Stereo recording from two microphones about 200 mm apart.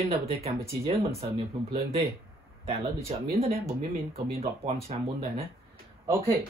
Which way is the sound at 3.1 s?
30° right (ahead or behind).